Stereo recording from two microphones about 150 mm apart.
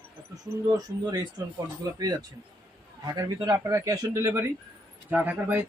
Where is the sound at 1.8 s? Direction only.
25° right (ahead or behind).